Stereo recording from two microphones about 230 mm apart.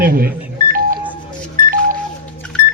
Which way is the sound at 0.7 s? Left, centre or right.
Right.